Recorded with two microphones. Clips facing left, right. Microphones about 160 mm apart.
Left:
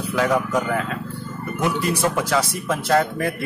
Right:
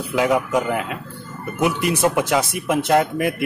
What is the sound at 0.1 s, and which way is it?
Speech, 15° right (ahead or behind).